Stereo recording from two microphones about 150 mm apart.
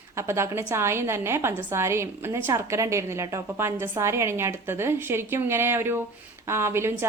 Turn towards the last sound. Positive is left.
turn(degrees=-15)  # may be behind; listen again after turning